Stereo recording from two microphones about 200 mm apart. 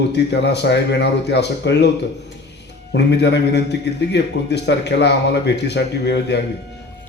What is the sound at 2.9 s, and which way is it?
A man's voice, 60° left (ahead or behind).